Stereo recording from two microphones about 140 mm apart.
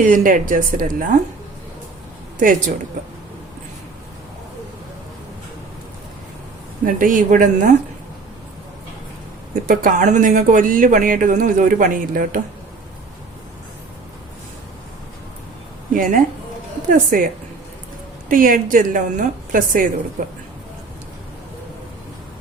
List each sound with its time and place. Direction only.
0.0 s speech: 70° right (ahead or behind)
2.4 s speech: 70° right (ahead or behind)
6.8 s speech: 75° right (ahead or behind)
9.6 s speech: 70° right (ahead or behind)
15.9 s a woman's voice: 75° right (ahead or behind)
18.3 s speech: 80° right